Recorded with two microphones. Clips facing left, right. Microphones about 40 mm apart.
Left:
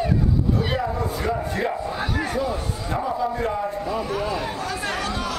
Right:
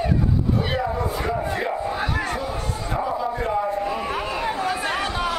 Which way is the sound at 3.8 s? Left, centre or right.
Right.